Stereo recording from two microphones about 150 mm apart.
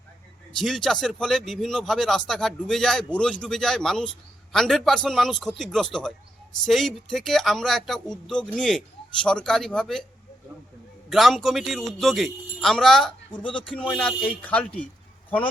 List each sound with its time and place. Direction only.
0.5 s speech: centre (ahead or behind)
11.1 s speech: centre (ahead or behind)
13.3 s speech: 35° left (ahead or behind)
13.9 s speech: 5° left (ahead or behind)